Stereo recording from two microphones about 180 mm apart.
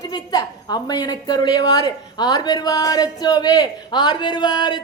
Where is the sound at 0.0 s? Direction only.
20° left (ahead or behind).